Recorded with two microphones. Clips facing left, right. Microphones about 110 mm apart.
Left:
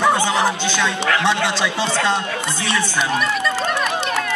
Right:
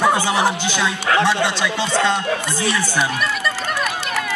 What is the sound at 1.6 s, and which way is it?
Speech, 25° left (ahead or behind).